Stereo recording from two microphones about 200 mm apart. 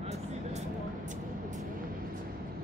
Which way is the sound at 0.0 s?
35° right (ahead or behind).